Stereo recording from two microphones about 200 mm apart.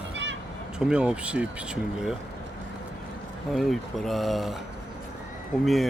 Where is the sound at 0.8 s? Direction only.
5° right (ahead or behind).